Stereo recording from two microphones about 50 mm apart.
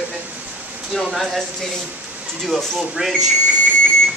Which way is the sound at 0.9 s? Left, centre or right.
Centre.